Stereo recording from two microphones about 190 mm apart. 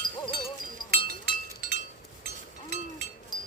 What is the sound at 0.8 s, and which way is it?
Chink, 50° right (ahead or behind).